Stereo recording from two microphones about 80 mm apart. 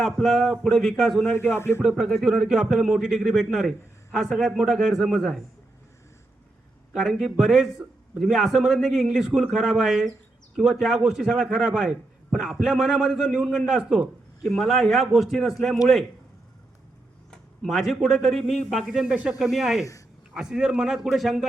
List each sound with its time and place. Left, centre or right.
0.0 s a man's voice: centre
1.2 s speech: left
1.8 s a man's voice: centre
6.9 s a man's voice: centre
17.3 s a man's voice: centre